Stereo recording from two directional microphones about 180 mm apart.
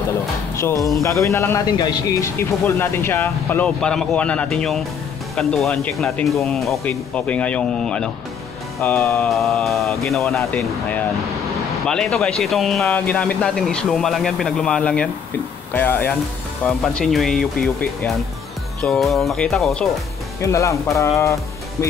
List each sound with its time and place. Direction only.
0.6 s a man's voice: 15° left (ahead or behind)
9.1 s a man's voice: 5° left (ahead or behind)
20.3 s a man's voice: 15° left (ahead or behind)